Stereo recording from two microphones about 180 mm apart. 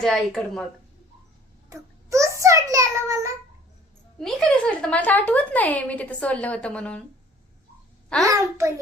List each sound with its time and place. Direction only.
0.0 s speech: centre (ahead or behind)
1.7 s child singing: 15° right (ahead or behind)
4.2 s speech: 5° left (ahead or behind)
8.3 s a child's voice: 15° right (ahead or behind)